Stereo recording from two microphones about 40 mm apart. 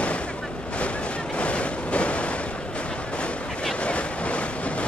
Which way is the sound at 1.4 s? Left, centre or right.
Left.